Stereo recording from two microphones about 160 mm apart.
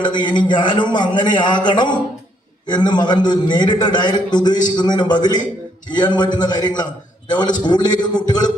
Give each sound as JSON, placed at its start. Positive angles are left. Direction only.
{"t": 0.0, "sound": "a man's voice", "side_deg": 30}